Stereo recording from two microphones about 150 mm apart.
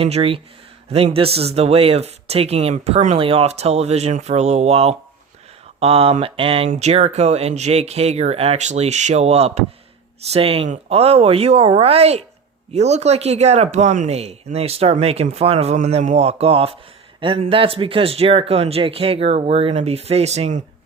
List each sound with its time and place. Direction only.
0.0 s speech: 40° right (ahead or behind)